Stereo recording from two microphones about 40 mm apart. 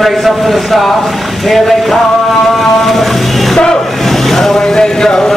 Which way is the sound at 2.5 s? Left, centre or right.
Centre.